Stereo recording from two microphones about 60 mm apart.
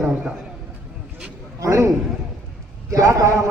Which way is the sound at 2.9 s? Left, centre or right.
Right.